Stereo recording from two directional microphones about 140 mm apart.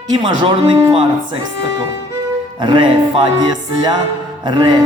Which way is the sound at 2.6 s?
35° right (ahead or behind).